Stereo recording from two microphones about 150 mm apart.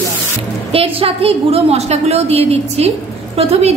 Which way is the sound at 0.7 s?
40° right (ahead or behind).